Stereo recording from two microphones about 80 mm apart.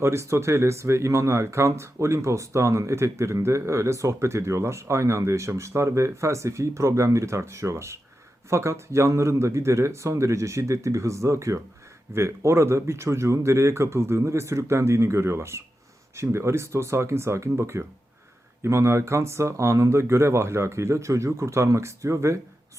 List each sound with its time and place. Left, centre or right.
0.0 s speech: right